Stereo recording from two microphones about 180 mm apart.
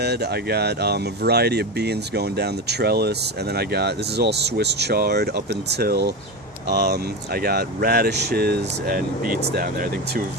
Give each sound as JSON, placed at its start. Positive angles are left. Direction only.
{"t": 0.0, "sound": "speech", "side_deg": -65}